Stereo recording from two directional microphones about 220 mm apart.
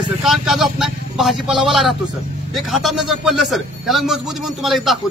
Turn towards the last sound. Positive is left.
turn(degrees=0)  # may be behind; listen again after turning